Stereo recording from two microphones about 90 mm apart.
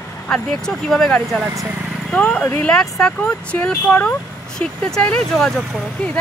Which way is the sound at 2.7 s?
5° left (ahead or behind).